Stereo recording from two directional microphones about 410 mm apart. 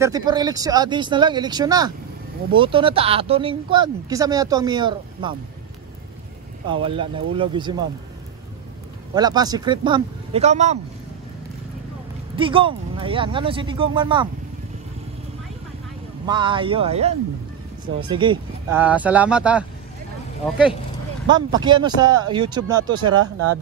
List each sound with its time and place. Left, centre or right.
0.0 s speech: centre
6.7 s speech: centre
9.1 s speech: centre
12.4 s speech: centre
16.3 s speech: centre
21.5 s speech: centre
23.0 s speech: right